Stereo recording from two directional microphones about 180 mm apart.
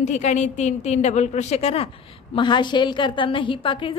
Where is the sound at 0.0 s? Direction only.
40° left (ahead or behind).